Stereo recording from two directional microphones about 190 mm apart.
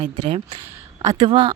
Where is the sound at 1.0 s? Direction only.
20° right (ahead or behind).